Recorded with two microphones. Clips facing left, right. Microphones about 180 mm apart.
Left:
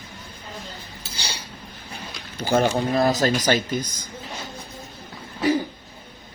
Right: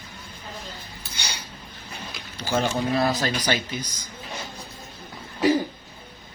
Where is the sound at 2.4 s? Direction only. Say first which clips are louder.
Left 5 dB; 50° left (ahead or behind).